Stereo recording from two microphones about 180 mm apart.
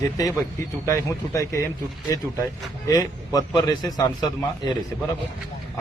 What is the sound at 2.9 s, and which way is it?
A man's voice, 20° left (ahead or behind).